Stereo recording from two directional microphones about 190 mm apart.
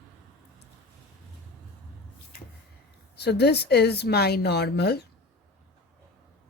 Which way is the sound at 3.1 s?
60° left (ahead or behind).